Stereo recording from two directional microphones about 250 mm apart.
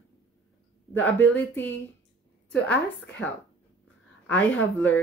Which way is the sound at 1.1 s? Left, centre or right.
Centre.